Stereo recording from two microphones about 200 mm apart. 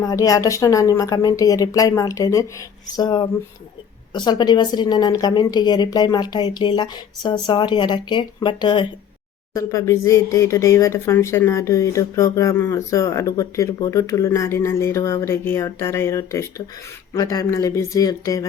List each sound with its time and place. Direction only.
0.0 s speech: 20° left (ahead or behind)